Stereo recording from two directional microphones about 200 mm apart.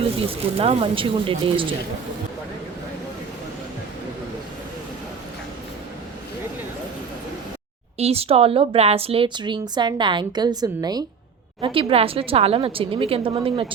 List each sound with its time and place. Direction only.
0.3 s speech: 30° right (ahead or behind)
7.9 s speech: 30° right (ahead or behind)